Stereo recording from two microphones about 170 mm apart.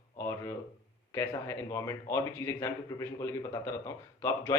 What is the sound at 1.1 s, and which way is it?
A man's voice, 15° left (ahead or behind).